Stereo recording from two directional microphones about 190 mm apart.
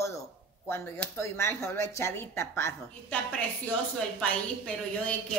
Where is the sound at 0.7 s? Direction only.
10° left (ahead or behind).